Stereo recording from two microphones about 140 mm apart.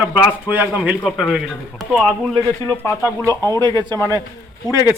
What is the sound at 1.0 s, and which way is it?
Speech, 5° left (ahead or behind).